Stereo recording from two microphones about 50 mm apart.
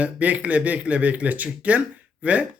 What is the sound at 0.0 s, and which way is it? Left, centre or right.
Speech, right.